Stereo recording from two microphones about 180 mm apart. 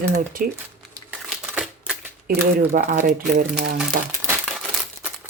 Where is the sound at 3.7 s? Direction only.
15° right (ahead or behind).